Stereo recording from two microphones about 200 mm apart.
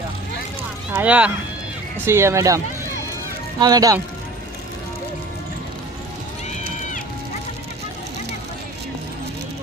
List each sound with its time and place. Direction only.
0.9 s speech: 5° right (ahead or behind)
3.6 s speech: 20° right (ahead or behind)